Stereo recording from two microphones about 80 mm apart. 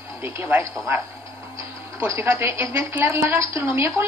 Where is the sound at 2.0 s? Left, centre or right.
Right.